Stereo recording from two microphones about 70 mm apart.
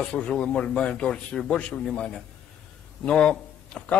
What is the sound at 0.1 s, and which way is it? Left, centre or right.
A man's voice, centre.